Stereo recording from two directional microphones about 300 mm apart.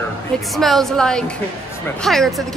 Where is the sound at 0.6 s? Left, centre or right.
Centre.